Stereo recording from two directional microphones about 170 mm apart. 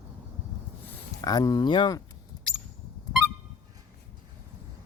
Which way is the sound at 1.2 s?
20° left (ahead or behind).